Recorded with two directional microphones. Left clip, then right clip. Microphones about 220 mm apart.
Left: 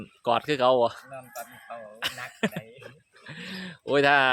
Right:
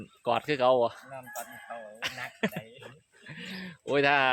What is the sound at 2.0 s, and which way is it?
Speech, 15° left (ahead or behind).